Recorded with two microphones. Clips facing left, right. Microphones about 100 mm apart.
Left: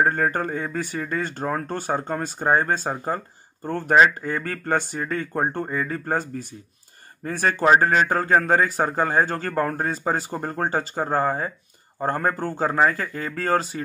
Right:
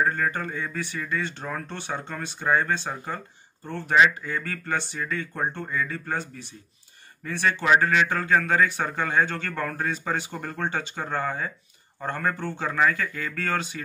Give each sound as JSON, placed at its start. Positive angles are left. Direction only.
{"t": 0.0, "sound": "speech", "side_deg": 45}